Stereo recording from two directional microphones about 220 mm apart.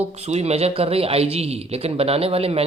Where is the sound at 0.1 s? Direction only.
30° right (ahead or behind).